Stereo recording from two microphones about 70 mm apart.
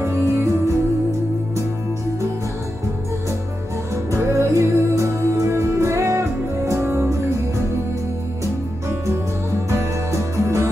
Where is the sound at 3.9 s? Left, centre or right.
Right.